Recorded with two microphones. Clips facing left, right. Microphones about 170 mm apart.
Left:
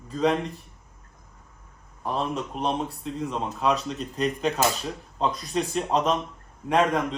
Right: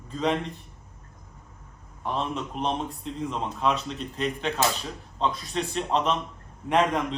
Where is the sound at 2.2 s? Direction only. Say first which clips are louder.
Left 2 dB; 5° left (ahead or behind).